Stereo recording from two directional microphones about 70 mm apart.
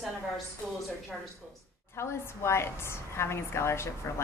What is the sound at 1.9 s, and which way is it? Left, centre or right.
A woman's voice, left.